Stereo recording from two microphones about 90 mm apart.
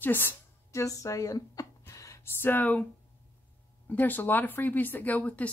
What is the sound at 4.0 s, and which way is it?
A woman's voice, 20° left (ahead or behind).